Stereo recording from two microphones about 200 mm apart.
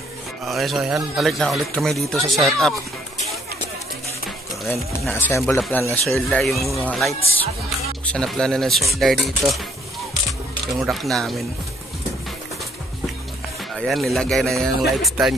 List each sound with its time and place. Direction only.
0.5 s speech: centre (ahead or behind)
5.0 s speech: 10° left (ahead or behind)
10.8 s speech: centre (ahead or behind)
13.7 s speech: centre (ahead or behind)